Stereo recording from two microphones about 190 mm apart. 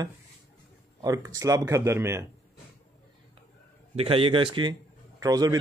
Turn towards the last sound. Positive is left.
turn(degrees=-20)  # may be behind; listen again after turning